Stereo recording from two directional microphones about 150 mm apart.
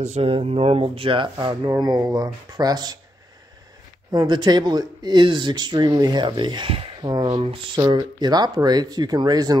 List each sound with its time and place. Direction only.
0.0 s speech: 45° right (ahead or behind); by 3.0 s 25° right (ahead or behind)
4.1 s speech: 30° right (ahead or behind)